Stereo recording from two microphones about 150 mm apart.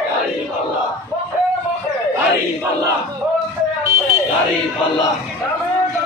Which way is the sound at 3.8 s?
20° right (ahead or behind).